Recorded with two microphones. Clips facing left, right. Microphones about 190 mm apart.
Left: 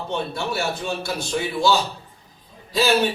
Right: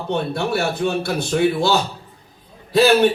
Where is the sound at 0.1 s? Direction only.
55° right (ahead or behind).